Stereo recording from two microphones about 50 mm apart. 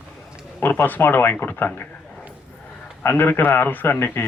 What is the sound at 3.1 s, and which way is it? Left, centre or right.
A man's voice, left.